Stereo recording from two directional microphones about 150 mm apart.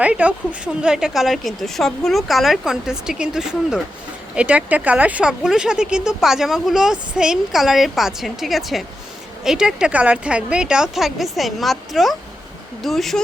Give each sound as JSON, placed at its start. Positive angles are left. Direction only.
{"t": 0.0, "sound": "speech", "side_deg": -10}